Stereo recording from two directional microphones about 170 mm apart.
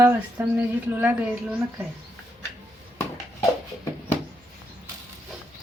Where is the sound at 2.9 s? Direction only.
15° left (ahead or behind).